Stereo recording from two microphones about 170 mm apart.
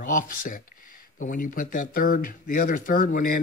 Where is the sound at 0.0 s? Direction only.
50° left (ahead or behind).